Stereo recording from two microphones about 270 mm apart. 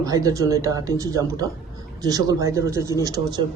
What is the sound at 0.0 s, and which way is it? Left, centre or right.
Speech, centre.